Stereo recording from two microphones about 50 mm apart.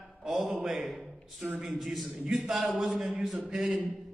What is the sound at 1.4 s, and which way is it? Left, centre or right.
Speech, right.